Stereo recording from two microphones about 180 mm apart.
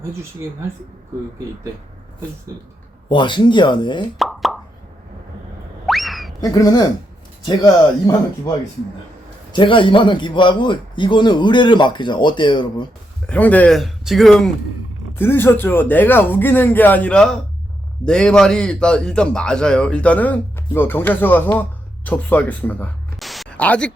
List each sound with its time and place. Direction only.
3.1 s a man's voice: 25° left (ahead or behind)
4.2 s plop: centre (ahead or behind)
5.8 s a sound: centre (ahead or behind)
6.4 s a man's voice: 20° left (ahead or behind)
9.5 s a man's voice: 25° left (ahead or behind)
13.2 s a man's voice: 10° left (ahead or behind)